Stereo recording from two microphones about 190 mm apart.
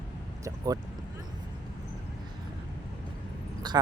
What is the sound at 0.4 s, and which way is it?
Speech, 20° right (ahead or behind).